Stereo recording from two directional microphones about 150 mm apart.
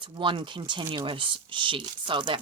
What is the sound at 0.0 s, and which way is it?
Speech, 35° right (ahead or behind).